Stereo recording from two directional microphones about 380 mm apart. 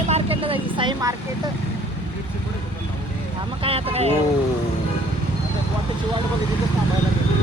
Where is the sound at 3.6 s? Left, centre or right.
Centre.